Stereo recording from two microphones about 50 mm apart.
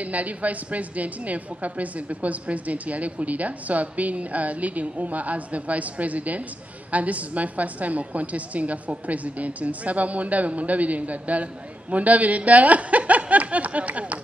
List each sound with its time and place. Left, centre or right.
0.0 s a woman's voice: right